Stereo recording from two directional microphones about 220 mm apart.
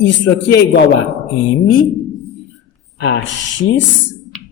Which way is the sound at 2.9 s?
55° left (ahead or behind).